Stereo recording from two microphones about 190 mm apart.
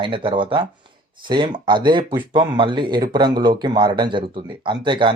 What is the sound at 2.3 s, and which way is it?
Speech, 25° right (ahead or behind).